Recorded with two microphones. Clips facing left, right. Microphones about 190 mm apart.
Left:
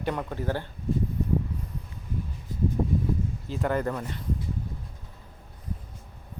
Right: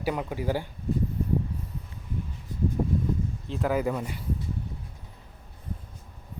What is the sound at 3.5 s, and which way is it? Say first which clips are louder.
Speech: right 1 dB; 5° right (ahead or behind).